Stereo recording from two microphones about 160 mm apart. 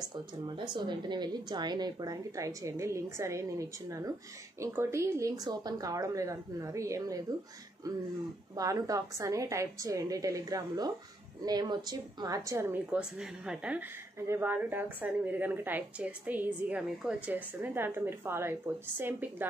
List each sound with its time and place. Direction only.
0.0 s a woman's voice: 30° right (ahead or behind)
8.5 s a woman's voice: 20° right (ahead or behind)